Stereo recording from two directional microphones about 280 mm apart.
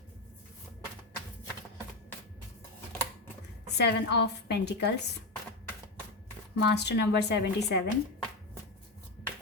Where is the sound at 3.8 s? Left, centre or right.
Left.